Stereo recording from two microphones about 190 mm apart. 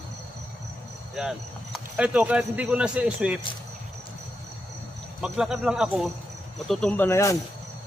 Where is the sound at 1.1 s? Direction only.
5° right (ahead or behind).